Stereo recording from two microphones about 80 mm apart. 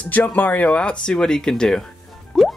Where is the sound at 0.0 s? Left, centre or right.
Centre.